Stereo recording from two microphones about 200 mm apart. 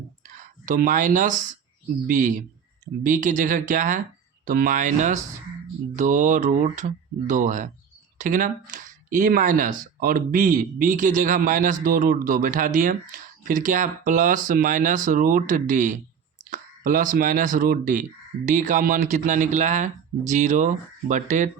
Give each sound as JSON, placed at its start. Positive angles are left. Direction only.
{"t": 0.3, "sound": "a man's voice", "side_deg": -40}